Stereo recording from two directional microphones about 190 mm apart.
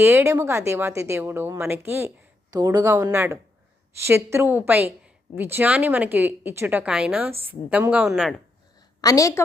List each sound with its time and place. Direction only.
0.0 s a woman's voice: 15° right (ahead or behind)
9.0 s a woman's voice: 20° left (ahead or behind)